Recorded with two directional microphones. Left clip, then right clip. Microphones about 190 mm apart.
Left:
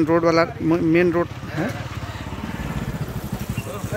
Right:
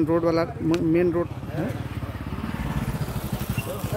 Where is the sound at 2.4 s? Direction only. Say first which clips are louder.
Even; 35° left (ahead or behind).